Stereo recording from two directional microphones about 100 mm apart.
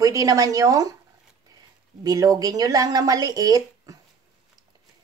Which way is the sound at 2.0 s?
40° right (ahead or behind).